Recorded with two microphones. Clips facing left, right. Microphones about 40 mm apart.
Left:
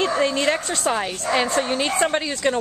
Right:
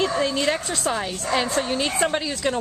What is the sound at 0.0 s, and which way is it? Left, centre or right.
A woman's voice, centre.